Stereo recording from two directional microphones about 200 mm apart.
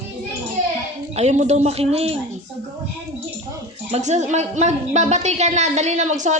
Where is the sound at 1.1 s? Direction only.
35° right (ahead or behind).